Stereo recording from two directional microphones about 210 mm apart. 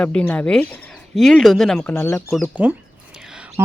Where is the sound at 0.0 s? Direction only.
5° left (ahead or behind).